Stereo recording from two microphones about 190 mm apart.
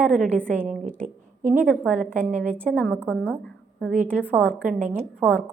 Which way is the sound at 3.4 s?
5° left (ahead or behind).